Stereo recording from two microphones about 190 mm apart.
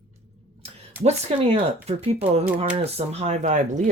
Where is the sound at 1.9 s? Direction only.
35° right (ahead or behind).